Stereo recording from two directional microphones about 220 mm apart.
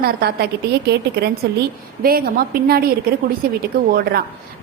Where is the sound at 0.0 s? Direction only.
45° right (ahead or behind).